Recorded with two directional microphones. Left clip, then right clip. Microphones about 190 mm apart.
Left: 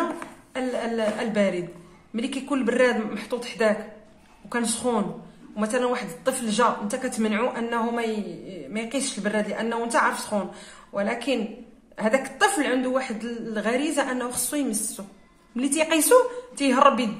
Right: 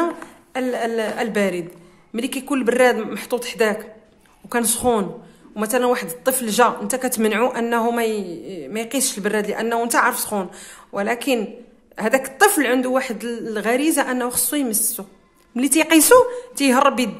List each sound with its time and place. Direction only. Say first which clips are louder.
0.5 s a woman's voice: right 5 dB; 40° right (ahead or behind)